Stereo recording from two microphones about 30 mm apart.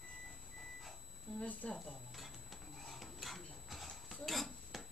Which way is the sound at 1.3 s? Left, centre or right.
Centre.